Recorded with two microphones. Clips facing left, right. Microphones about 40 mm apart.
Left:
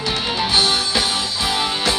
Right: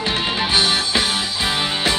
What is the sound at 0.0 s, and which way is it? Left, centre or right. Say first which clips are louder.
Music: right 1 dB; right.